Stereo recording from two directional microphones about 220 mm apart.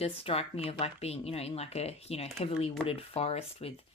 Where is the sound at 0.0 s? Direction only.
25° left (ahead or behind).